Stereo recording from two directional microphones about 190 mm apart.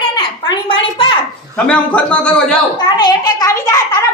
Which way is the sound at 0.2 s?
25° left (ahead or behind).